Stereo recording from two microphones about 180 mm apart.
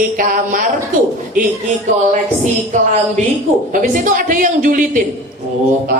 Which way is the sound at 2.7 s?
45° right (ahead or behind).